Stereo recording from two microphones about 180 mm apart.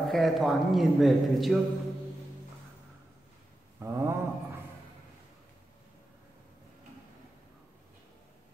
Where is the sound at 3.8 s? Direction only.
15° right (ahead or behind).